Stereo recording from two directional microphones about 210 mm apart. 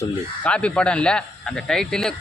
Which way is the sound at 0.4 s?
5° left (ahead or behind).